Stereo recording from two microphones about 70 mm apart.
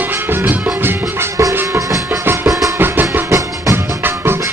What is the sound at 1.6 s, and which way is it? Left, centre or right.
Music, right.